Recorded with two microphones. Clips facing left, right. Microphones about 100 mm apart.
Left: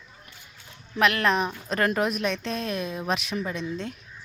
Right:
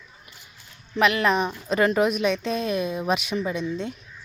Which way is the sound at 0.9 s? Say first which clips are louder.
Right 2 dB; centre (ahead or behind).